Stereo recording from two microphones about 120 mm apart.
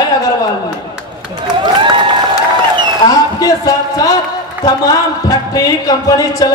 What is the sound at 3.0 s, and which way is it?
A man's voice, 30° left (ahead or behind).